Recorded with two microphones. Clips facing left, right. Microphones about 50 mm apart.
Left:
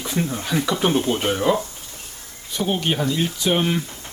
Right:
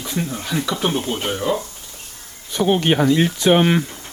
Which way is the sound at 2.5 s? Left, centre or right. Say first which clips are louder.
Right 6 dB; right.